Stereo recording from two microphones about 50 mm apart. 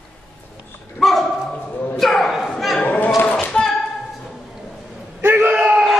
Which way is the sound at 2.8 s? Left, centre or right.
Left.